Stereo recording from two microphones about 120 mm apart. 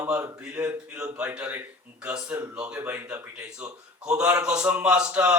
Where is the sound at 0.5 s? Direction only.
15° right (ahead or behind).